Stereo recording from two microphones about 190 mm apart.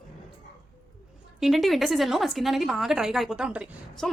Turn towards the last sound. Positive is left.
turn(degrees=0)  # may be behind; listen again after turning